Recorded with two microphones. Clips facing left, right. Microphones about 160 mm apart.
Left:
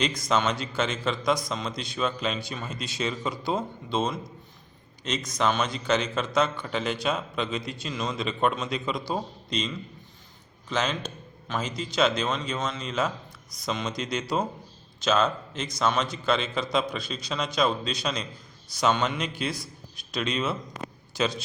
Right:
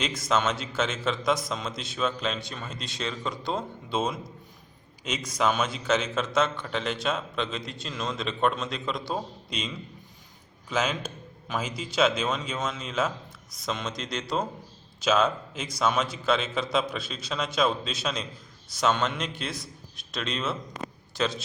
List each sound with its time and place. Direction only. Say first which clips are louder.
0.0 s a man's voice: left 1 dB; 5° right (ahead or behind)